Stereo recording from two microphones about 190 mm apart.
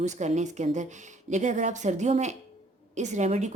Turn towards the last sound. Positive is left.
turn(degrees=-35)  # may be behind; listen again after turning